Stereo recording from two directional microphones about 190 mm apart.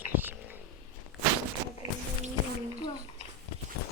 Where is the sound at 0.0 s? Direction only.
10° right (ahead or behind).